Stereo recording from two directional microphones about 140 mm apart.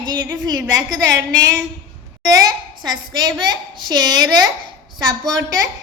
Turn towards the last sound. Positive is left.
turn(degrees=-25)  # may be behind; listen again after turning